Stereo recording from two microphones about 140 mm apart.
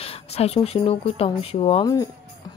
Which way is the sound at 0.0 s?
45° left (ahead or behind).